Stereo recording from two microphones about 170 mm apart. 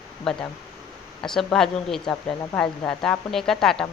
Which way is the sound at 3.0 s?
Centre (ahead or behind).